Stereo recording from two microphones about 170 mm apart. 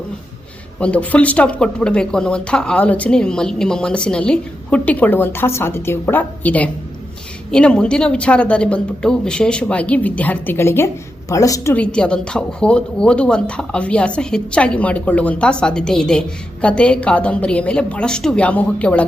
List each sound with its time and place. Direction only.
0.8 s a woman's voice: 10° left (ahead or behind)
11.7 s a woman's voice: 5° left (ahead or behind)